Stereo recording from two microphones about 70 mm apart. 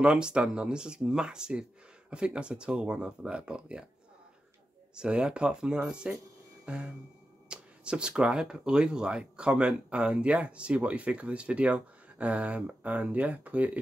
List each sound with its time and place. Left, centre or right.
0.0 s speech: centre
4.9 s speech: centre
6.6 s a sound: centre
8.2 s speech: centre